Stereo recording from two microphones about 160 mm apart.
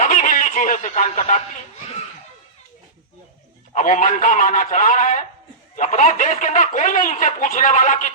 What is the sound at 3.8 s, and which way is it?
Speech, 50° left (ahead or behind).